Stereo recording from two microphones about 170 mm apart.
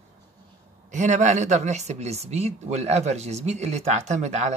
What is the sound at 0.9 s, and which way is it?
Speech, 45° right (ahead or behind).